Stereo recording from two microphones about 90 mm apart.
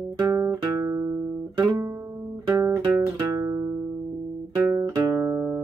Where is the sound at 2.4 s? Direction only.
25° right (ahead or behind).